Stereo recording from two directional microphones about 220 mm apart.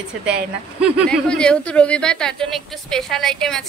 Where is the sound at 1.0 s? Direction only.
5° left (ahead or behind).